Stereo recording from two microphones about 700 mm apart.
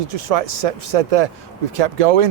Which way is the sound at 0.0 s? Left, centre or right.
Right.